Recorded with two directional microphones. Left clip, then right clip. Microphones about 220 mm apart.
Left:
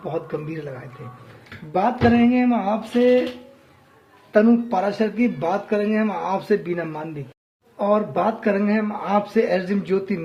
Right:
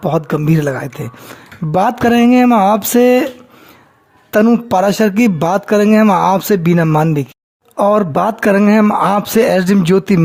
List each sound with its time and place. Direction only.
0.0 s speech: 55° right (ahead or behind)
4.3 s speech: 50° right (ahead or behind)